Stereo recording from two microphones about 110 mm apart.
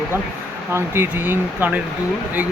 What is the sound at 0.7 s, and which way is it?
Speech, 20° right (ahead or behind).